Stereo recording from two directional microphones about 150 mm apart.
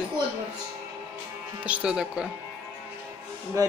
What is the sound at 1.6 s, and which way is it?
Speech, 5° right (ahead or behind).